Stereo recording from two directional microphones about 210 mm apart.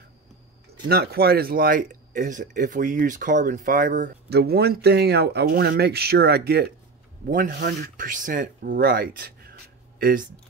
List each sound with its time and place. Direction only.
0.8 s speech: 50° right (ahead or behind)